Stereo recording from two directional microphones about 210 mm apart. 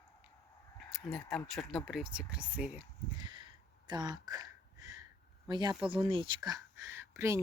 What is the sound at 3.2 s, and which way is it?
Gasp, 20° right (ahead or behind).